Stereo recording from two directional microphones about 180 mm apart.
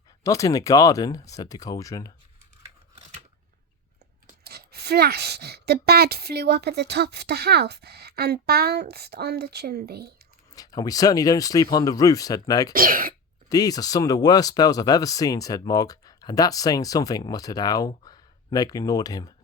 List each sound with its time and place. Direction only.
0.2 s speech: 20° left (ahead or behind)
4.3 s speech: 60° right (ahead or behind)
10.5 s speech: 20° left (ahead or behind)
12.7 s speech: 50° right (ahead or behind)
13.5 s speech: 20° left (ahead or behind)